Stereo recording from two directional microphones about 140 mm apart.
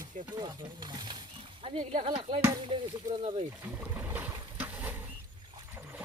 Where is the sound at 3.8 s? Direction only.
15° right (ahead or behind).